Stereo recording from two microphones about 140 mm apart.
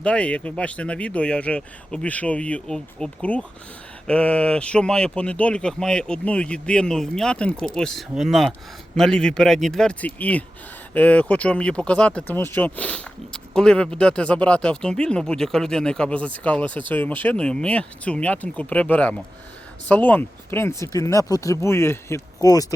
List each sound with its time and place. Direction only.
0.0 s speech: 10° left (ahead or behind); by 22.6 s 25° left (ahead or behind)